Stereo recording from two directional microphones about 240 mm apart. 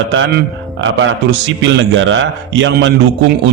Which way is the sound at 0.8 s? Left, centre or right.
Right.